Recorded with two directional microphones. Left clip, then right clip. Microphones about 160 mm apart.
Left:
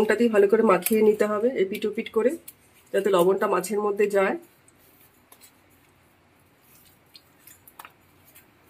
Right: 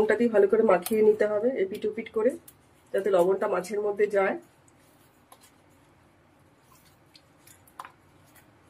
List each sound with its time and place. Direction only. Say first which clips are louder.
0.1 s speech: left 2 dB; 55° left (ahead or behind)